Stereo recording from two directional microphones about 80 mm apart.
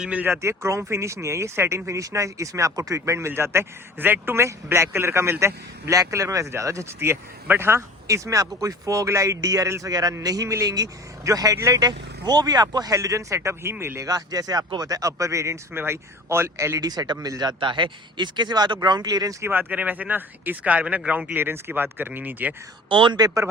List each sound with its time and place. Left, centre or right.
0.0 s speech: centre
0.3 s speech: right
8.0 s speech: right
9.9 s speech: right
11.5 s speech: right
11.8 s speech: right
14.0 s speech: right
17.6 s speech: right
19.4 s speech: right
22.9 s a man's voice: right
23.2 s speech: right